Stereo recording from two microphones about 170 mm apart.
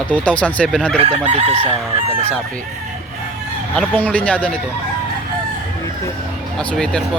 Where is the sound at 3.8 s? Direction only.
10° left (ahead or behind).